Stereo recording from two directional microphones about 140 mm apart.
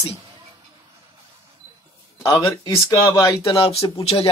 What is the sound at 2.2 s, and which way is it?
Speech, 25° left (ahead or behind).